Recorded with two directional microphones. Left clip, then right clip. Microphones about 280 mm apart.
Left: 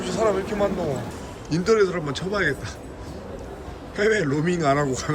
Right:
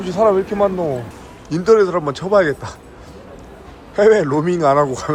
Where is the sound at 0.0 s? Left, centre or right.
Centre.